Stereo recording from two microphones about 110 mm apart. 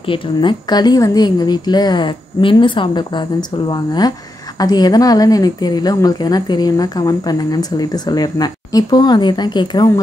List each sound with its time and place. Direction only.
0.0 s a woman's voice: 50° left (ahead or behind)